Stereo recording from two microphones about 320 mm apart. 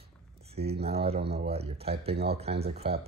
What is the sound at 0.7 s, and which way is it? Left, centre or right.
Speech, centre.